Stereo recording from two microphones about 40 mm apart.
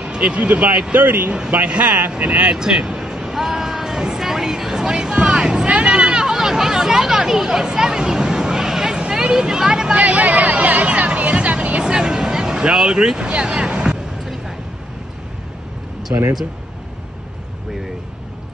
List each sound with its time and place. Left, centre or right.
0.0 s speech: right
0.9 s speech: right
1.7 s speech: right
2.0 s speech: right
2.2 s speech: right
2.5 s vehicle: centre
5.9 s chatter: centre
9.0 s a sound: centre
9.9 s speech: right
11.1 s music: right; by 12.5 s centre
12.7 s speech: centre
16.1 s speech: right